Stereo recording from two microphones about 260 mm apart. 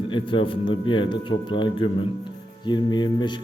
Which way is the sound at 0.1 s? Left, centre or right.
Centre.